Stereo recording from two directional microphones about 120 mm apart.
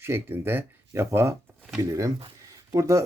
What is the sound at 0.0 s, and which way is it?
Speech, 20° right (ahead or behind).